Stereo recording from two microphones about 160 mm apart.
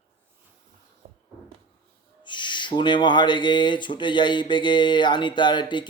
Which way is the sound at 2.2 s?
30° left (ahead or behind).